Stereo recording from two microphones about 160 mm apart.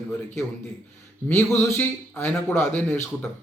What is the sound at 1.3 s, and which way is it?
A man's voice, 15° left (ahead or behind).